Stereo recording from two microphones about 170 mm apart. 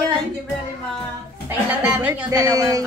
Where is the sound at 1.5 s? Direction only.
10° right (ahead or behind).